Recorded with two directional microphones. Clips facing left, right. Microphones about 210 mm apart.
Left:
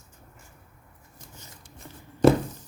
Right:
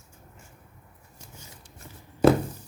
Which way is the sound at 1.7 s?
5° right (ahead or behind).